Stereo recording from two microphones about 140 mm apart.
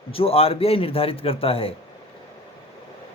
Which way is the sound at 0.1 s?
45° left (ahead or behind).